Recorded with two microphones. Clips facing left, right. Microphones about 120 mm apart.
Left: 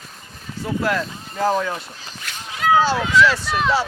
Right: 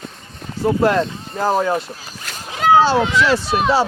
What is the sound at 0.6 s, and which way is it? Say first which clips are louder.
Speech: right 7 dB; 35° right (ahead or behind).